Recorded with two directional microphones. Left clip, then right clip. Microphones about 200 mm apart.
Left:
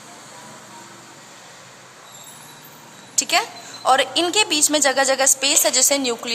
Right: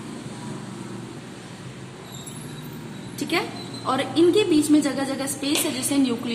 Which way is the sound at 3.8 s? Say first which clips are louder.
Left 3 dB; 50° left (ahead or behind).